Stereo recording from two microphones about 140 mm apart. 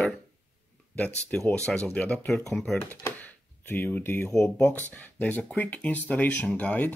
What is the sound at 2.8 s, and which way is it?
Speech, 15° left (ahead or behind).